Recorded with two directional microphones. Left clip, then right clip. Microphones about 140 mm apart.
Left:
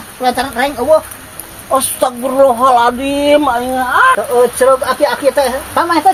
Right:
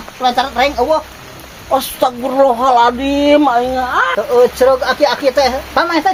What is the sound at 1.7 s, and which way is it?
Speech, 15° right (ahead or behind).